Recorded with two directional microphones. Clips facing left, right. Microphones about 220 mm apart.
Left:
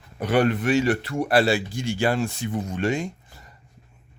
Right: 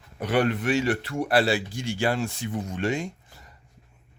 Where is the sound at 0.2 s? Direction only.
45° left (ahead or behind).